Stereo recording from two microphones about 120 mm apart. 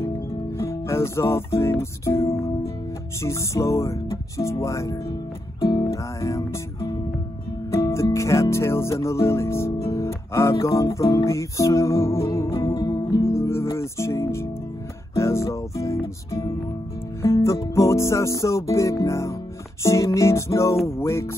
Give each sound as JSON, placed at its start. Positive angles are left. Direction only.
{"t": 0.6, "sound": "music", "side_deg": 20}
{"t": 12.7, "sound": "music", "side_deg": 40}
{"t": 13.2, "sound": "music", "side_deg": 20}